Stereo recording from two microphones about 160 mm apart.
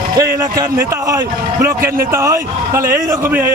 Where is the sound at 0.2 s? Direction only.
20° right (ahead or behind).